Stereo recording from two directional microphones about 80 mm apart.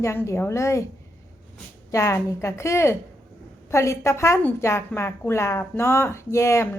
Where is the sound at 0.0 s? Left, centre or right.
Left.